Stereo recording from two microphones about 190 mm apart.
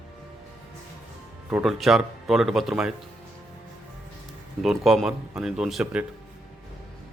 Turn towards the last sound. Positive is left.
turn(degrees=0)  # may be behind; listen again after turning